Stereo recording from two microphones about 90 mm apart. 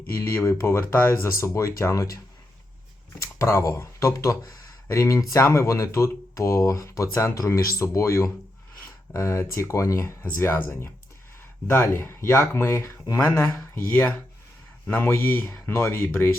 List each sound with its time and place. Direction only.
0.3 s speech: 30° left (ahead or behind)
13.9 s speech: 15° left (ahead or behind)